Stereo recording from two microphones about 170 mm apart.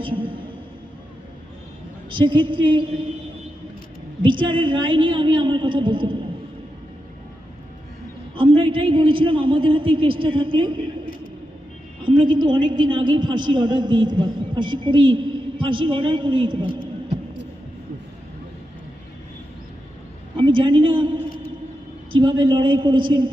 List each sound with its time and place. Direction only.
0.0 s a sound: 30° right (ahead or behind)
2.0 s a woman's voice: 30° right (ahead or behind)
4.2 s a woman's voice: 30° right (ahead or behind)
8.4 s a man's voice: 30° right (ahead or behind)
12.0 s a woman's voice: 30° right (ahead or behind)
20.3 s a man's voice: 30° right (ahead or behind)